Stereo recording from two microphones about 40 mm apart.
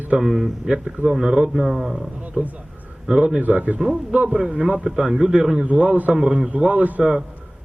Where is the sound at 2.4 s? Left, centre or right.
Right.